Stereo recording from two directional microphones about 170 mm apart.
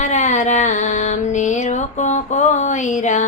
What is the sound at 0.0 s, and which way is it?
Music, 45° left (ahead or behind).